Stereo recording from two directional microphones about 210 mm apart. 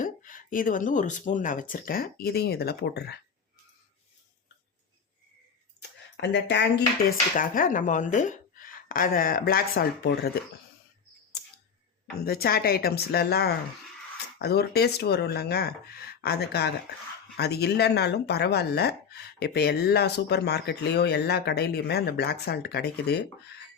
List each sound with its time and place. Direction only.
0.0 s speech: 40° left (ahead or behind)
6.1 s speech: 60° left (ahead or behind)
7.3 s speech: 40° left (ahead or behind)
12.2 s speech: 45° left (ahead or behind)